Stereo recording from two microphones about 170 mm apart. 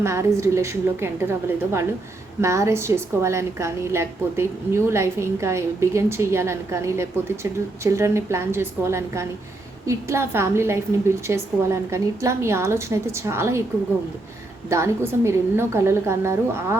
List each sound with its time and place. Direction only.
0.0 s a woman's voice: 15° right (ahead or behind)
14.7 s a woman's voice: 15° right (ahead or behind)